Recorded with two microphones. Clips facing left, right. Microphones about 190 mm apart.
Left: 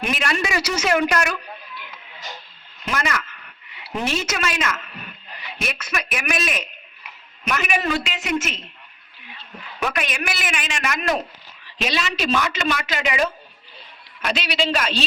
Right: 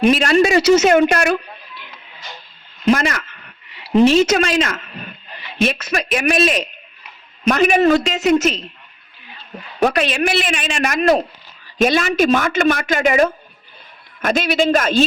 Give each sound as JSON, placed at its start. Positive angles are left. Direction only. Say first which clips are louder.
{"t": 0.0, "sound": "speech", "louder": "right 11 dB", "side_deg": -30}
{"t": 9.8, "sound": "a man's voice", "louder": "right 9 dB", "side_deg": -30}
{"t": 11.8, "sound": "a man's voice", "louder": "right 10 dB", "side_deg": -50}